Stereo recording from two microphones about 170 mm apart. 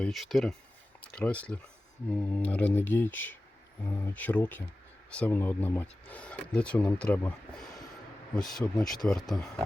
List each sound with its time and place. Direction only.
0.0 s speech: centre (ahead or behind)
8.6 s speech: 5° left (ahead or behind)